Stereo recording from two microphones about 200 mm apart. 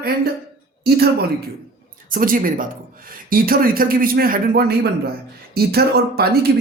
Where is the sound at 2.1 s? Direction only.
45° right (ahead or behind).